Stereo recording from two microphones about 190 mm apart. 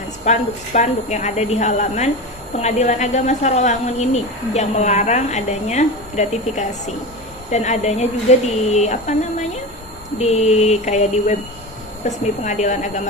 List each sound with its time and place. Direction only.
0.3 s speech: 40° left (ahead or behind)
10.2 s speech: 35° left (ahead or behind)